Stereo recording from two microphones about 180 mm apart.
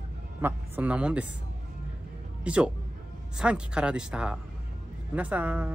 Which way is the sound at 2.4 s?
5° right (ahead or behind).